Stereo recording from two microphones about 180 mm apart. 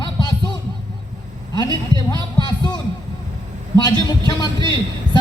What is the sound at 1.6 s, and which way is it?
A man's voice, 20° left (ahead or behind).